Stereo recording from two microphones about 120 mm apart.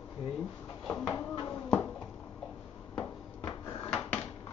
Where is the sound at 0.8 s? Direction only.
30° left (ahead or behind).